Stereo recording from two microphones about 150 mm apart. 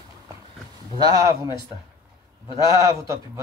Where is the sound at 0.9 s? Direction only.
25° right (ahead or behind).